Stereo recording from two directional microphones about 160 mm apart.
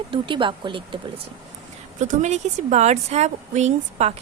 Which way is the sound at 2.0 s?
50° right (ahead or behind).